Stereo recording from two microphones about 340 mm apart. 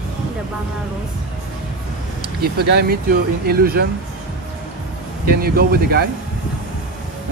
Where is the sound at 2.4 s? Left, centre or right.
Right.